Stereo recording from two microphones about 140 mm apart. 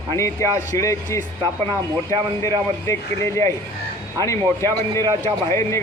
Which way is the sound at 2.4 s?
20° left (ahead or behind).